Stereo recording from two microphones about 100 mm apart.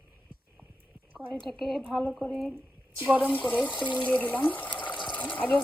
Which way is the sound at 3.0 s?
15° right (ahead or behind).